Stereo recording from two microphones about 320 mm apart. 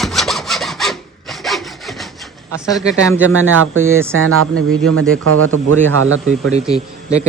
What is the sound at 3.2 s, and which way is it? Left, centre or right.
Speech, right.